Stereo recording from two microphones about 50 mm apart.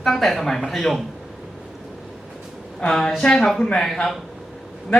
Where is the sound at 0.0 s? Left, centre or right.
Centre.